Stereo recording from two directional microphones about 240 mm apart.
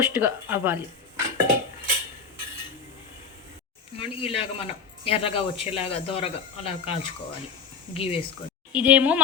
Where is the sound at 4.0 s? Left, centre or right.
Left.